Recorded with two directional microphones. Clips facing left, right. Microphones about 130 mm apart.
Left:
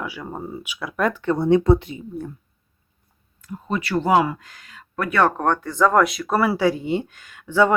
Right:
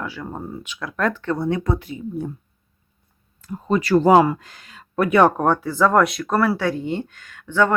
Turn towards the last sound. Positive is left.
turn(degrees=10)  # may be behind; listen again after turning